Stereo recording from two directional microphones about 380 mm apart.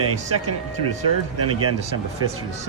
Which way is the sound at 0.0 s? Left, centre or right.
Right.